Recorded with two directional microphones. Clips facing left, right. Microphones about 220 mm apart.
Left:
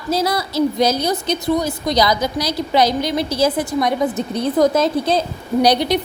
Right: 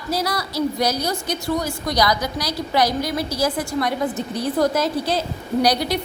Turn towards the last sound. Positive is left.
turn(degrees=20)  # may be behind; listen again after turning